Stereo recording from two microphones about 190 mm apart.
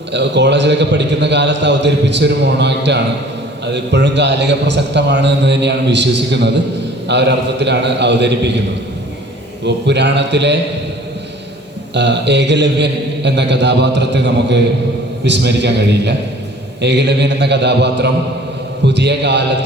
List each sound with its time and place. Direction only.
0.1 s a man's voice: 65° right (ahead or behind)
9.6 s a man's voice: 65° right (ahead or behind)
11.9 s a man's voice: 65° right (ahead or behind)